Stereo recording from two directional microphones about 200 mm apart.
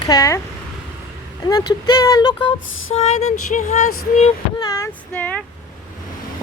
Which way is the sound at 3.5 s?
35° left (ahead or behind).